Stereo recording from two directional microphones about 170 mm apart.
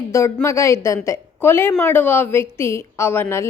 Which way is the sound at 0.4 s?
15° left (ahead or behind).